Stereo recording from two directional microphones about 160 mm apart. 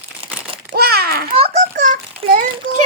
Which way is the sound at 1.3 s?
40° right (ahead or behind).